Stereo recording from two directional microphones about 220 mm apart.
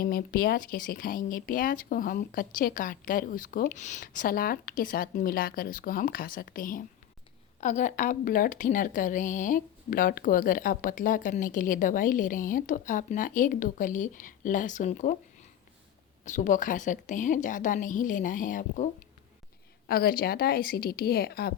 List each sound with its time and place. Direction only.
0.0 s a woman's voice: 40° left (ahead or behind)
16.2 s a woman's voice: 35° left (ahead or behind)
19.9 s a woman's voice: 40° left (ahead or behind)